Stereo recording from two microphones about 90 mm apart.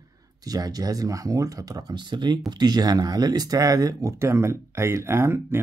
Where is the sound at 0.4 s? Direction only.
45° right (ahead or behind).